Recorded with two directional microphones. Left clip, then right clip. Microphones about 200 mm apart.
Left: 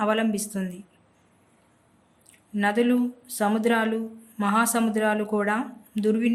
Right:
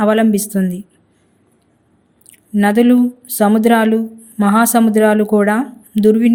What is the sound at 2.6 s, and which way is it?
Speech, 35° right (ahead or behind).